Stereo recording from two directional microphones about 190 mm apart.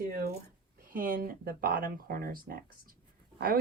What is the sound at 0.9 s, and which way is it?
A woman's voice, 50° right (ahead or behind).